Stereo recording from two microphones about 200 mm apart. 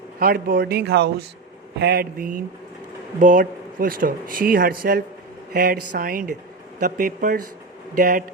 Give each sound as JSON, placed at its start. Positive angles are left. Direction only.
{"t": 0.2, "sound": "speech", "side_deg": -45}
{"t": 1.8, "sound": "speech", "side_deg": -55}